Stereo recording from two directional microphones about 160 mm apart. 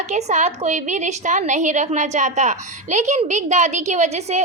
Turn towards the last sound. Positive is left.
turn(degrees=-45)  # may be behind; listen again after turning